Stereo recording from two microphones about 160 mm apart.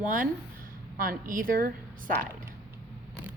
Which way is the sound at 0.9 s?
65° right (ahead or behind).